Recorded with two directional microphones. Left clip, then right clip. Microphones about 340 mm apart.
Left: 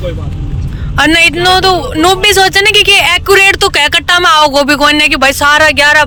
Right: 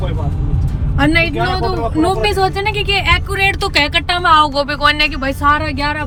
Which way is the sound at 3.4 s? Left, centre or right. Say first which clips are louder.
Left 7 dB; centre.